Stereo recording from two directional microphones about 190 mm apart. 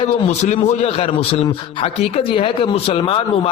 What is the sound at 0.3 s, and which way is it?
A man's voice, 35° left (ahead or behind).